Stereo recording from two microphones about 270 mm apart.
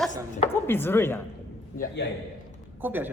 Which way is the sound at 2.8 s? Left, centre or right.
Centre.